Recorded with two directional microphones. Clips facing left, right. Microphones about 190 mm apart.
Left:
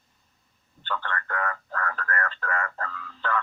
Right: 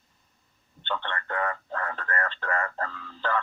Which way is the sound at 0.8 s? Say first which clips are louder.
Even; 25° right (ahead or behind).